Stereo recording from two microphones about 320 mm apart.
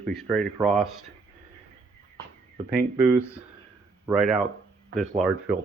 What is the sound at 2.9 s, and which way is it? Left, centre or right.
Speech, centre.